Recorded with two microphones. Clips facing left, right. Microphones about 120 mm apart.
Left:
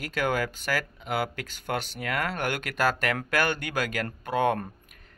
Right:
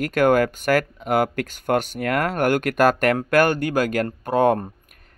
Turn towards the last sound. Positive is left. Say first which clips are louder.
# right 7 dB
turn(degrees=-40)  # may be behind; listen again after turning